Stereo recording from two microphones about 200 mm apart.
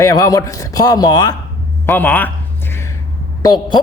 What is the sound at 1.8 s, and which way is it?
Speech, 10° left (ahead or behind).